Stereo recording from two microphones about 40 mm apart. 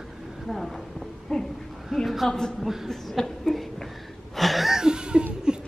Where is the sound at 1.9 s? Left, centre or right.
Centre.